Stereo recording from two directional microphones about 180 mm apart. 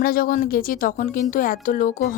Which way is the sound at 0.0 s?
50° left (ahead or behind).